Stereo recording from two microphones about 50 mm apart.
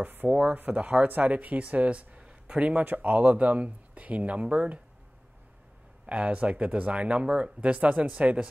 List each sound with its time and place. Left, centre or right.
0.0 s speech: right
0.3 s speech: centre
0.6 s speech: right
2.8 s speech: right
6.0 s speech: right